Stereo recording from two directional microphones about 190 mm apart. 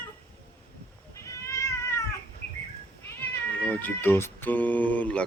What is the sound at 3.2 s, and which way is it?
Cat, 10° left (ahead or behind).